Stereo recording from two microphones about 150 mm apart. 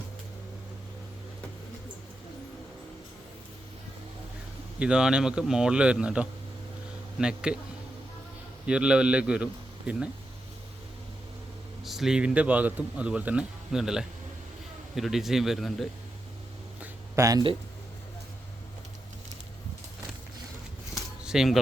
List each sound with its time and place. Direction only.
4.8 s speech: 5° right (ahead or behind)
8.6 s a man's voice: 5° right (ahead or behind)
11.8 s speech: centre (ahead or behind)
17.2 s speech: 25° right (ahead or behind)
21.2 s speech: centre (ahead or behind)